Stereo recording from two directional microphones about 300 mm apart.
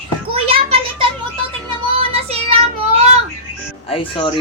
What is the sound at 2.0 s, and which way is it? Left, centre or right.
Child singing, centre.